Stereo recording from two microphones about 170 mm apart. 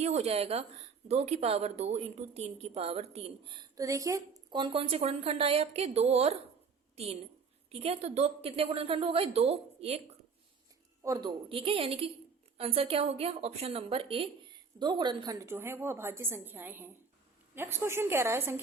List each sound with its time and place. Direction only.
0.0 s a woman's voice: 40° right (ahead or behind)
3.8 s a woman's voice: 20° right (ahead or behind); by 10.0 s 35° right (ahead or behind)
11.0 s a woman's voice: 20° right (ahead or behind)